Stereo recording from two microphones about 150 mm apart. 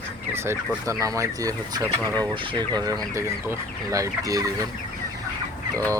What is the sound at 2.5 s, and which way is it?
Speech, 25° right (ahead or behind).